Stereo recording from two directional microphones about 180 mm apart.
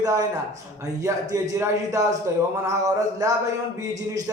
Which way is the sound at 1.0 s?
20° right (ahead or behind).